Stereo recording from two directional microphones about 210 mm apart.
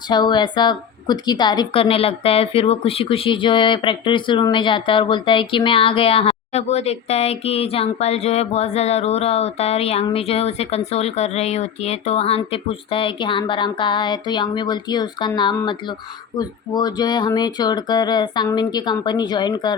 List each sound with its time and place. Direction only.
0.1 s a woman's voice: 20° left (ahead or behind)